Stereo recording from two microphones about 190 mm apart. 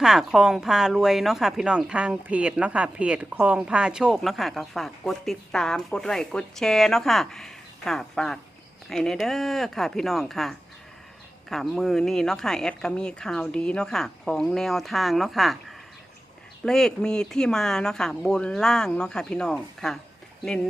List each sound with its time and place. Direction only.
0.0 s a woman's voice: centre (ahead or behind)
16.6 s a woman's voice: 5° left (ahead or behind)